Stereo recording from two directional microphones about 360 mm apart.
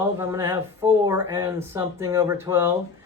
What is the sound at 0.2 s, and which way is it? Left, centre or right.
Speech, centre.